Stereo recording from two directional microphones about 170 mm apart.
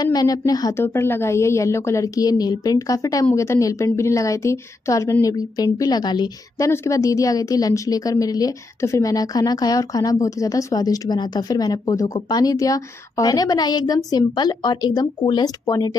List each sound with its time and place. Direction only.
0.0 s a woman's voice: 20° left (ahead or behind)